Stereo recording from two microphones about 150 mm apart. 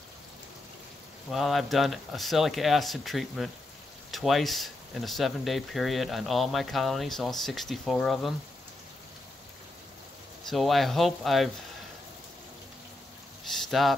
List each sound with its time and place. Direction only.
1.3 s speech: centre (ahead or behind)
10.5 s speech: centre (ahead or behind)
13.4 s a sound: centre (ahead or behind)